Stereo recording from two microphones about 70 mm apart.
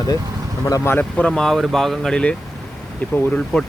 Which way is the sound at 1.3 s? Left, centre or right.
Centre.